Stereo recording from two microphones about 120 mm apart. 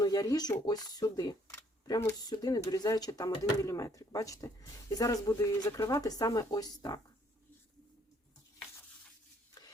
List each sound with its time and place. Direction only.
0.0 s speech: 30° left (ahead or behind)
1.5 s camera: 25° left (ahead or behind)
2.3 s speech: 30° left (ahead or behind)